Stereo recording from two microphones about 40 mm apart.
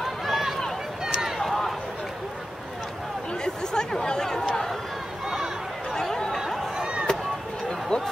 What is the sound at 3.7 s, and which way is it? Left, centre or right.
Chatter, centre.